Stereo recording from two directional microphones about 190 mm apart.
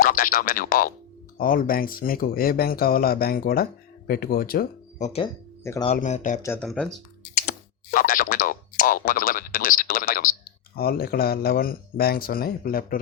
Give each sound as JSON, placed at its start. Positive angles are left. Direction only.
{"t": 0.0, "sound": "speech", "side_deg": 50}
{"t": 6.4, "sound": "speech", "side_deg": 10}
{"t": 7.4, "sound": "speech", "side_deg": 50}